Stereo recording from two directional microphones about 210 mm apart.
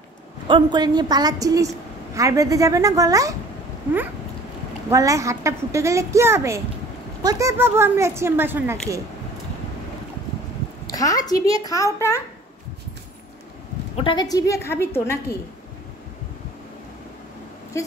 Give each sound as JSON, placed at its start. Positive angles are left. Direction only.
{"t": 0.5, "sound": "a woman's voice", "side_deg": -20}
{"t": 4.9, "sound": "a woman's voice", "side_deg": -15}
{"t": 10.9, "sound": "a child's voice", "side_deg": 15}
{"t": 13.9, "sound": "a child's voice", "side_deg": 25}
{"t": 17.8, "sound": "speech", "side_deg": 15}